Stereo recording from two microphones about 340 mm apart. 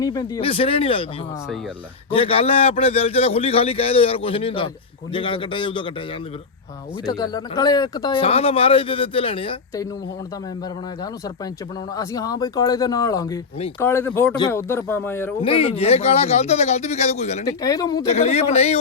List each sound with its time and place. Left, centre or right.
0.0 s speech: centre
2.0 s speech: centre
7.1 s speech: centre
11.9 s speech: centre